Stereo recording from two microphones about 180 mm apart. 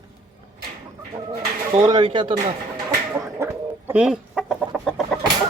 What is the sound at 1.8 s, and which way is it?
Speech, 25° right (ahead or behind).